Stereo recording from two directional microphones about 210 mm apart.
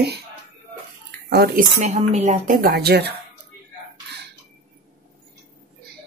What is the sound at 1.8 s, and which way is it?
Speech, 35° right (ahead or behind).